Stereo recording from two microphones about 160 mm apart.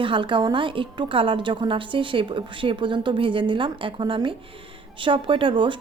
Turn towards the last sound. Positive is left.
turn(degrees=-30)  # may be behind; listen again after turning